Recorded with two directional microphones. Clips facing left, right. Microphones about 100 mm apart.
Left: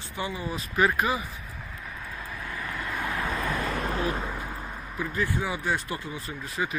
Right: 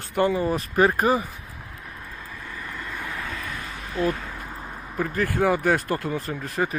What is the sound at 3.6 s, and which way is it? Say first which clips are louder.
Vehicle: left 7 dB; 65° left (ahead or behind).